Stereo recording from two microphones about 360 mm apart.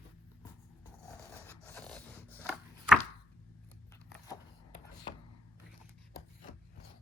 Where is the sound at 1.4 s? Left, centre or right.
Centre.